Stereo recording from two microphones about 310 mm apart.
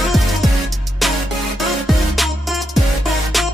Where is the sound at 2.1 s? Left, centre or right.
Centre.